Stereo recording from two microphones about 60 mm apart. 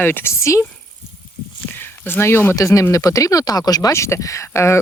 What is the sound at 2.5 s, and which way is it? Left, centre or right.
Speech, left.